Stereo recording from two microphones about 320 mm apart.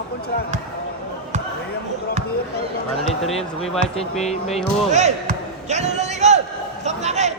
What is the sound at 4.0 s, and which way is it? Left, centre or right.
Speech, centre.